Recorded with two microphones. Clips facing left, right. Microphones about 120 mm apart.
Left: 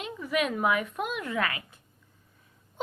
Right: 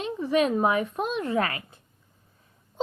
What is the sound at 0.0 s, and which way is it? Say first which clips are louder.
A woman's voice: right 6 dB; 30° right (ahead or behind).